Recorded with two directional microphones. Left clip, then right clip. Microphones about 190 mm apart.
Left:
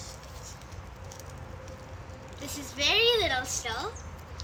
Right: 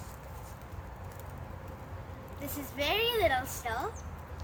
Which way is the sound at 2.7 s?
15° right (ahead or behind).